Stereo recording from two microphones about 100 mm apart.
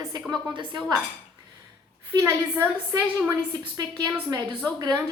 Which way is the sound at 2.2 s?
30° right (ahead or behind).